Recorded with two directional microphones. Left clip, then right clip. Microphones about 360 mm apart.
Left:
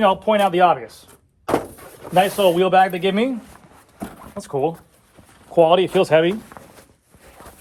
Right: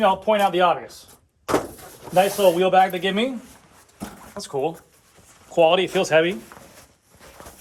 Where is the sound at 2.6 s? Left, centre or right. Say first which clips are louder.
Left 2 dB; centre.